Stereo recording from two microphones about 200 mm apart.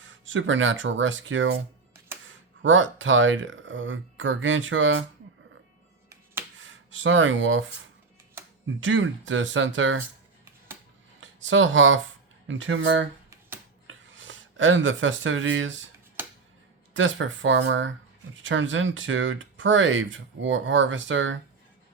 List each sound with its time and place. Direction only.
0.0 s speech: 70° right (ahead or behind)
6.6 s a sound: 70° right (ahead or behind)
8.6 s speech: 70° right (ahead or behind)
11.2 s speech: 70° right (ahead or behind)
16.9 s speech: 70° right (ahead or behind)